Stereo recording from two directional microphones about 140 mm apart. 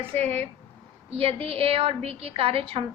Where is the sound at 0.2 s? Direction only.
50° right (ahead or behind).